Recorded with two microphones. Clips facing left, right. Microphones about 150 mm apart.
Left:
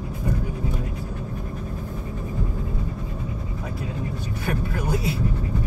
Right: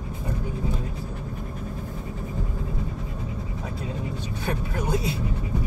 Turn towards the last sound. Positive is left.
turn(degrees=-25)  # may be behind; listen again after turning